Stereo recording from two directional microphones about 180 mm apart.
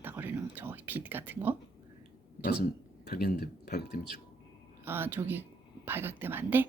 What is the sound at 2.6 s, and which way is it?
Speech, 60° left (ahead or behind).